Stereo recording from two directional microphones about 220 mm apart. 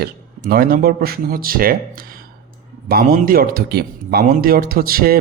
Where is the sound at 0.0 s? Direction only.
40° right (ahead or behind).